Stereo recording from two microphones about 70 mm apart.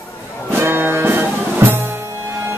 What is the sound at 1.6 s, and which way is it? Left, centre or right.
Drum, right.